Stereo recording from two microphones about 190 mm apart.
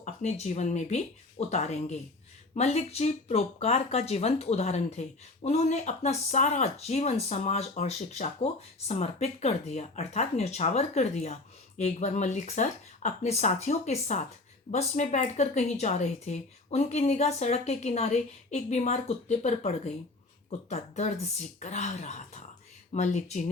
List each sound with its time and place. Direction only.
0.0 s speech: 35° left (ahead or behind)